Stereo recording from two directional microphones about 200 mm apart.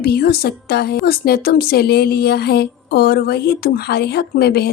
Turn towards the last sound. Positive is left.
turn(degrees=50)  # may be behind; listen again after turning